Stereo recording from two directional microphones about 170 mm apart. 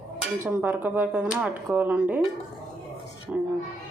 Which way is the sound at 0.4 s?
10° right (ahead or behind).